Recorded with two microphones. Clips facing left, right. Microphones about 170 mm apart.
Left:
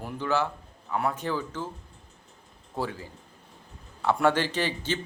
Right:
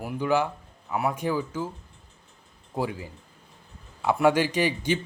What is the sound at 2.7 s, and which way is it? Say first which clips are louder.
Speech: right 3 dB; 15° right (ahead or behind).